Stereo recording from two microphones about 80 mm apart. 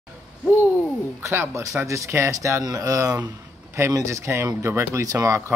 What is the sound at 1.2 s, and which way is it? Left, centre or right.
Speech, right.